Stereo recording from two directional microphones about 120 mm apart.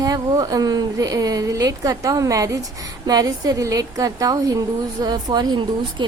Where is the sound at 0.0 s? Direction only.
30° right (ahead or behind).